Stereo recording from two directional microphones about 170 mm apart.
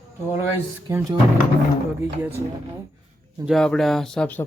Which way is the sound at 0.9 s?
20° right (ahead or behind).